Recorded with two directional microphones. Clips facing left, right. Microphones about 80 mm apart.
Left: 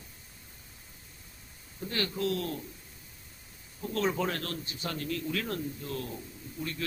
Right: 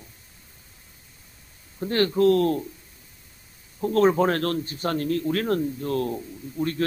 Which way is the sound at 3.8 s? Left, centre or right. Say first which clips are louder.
Right 11 dB; right.